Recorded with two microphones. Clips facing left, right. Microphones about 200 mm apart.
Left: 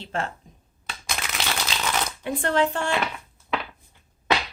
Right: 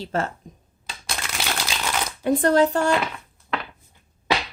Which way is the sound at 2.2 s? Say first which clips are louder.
Right 6 dB; 40° right (ahead or behind).